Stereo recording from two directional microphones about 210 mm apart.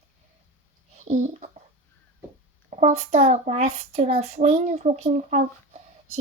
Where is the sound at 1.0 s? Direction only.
35° right (ahead or behind).